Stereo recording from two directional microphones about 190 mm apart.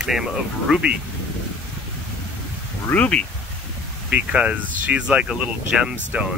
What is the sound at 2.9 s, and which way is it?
Speech, 5° left (ahead or behind).